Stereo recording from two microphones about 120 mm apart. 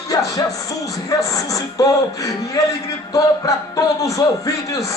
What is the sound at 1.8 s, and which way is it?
Speech, 30° left (ahead or behind).